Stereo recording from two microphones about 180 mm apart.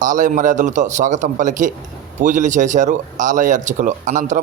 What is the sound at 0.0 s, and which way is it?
Speech, 45° right (ahead or behind).